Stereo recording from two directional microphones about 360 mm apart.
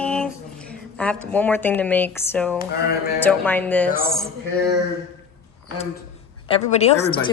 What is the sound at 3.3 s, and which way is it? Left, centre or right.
Speech, centre.